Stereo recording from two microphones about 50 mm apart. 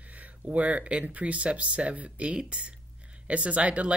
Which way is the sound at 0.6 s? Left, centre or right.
Right.